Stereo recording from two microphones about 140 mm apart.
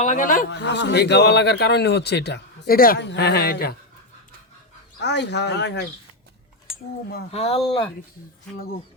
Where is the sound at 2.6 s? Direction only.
90° left.